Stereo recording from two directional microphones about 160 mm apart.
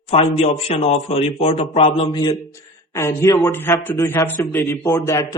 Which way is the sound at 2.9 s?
20° left (ahead or behind).